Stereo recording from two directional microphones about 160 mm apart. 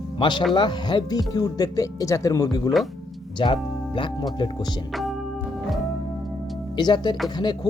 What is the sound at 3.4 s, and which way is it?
Speech, 30° left (ahead or behind).